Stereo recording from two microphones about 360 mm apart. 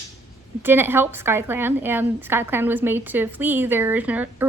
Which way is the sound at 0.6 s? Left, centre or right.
Centre.